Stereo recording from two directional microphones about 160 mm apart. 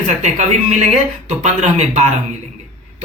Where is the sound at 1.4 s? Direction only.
45° right (ahead or behind).